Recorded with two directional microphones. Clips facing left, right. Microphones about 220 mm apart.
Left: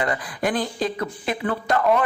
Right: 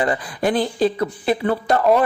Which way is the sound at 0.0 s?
30° right (ahead or behind).